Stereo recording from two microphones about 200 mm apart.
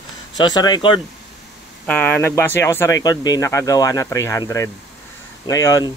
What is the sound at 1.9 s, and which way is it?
Speech, 10° left (ahead or behind).